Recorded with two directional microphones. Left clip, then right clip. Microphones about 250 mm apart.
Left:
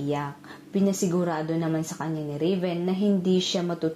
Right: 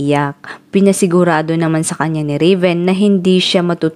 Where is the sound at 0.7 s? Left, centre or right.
Right.